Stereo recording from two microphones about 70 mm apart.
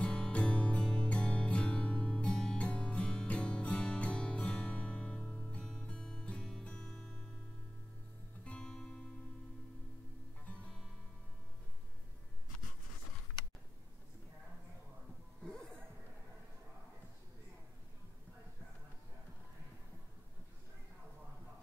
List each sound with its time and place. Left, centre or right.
0.0 s music: centre
8.5 s music: centre
10.4 s music: centre
15.4 s music: centre